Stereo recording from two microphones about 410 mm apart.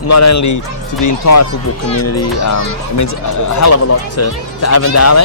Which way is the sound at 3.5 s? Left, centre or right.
Left.